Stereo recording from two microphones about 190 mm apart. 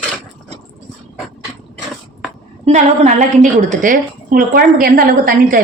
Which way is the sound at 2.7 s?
35° right (ahead or behind).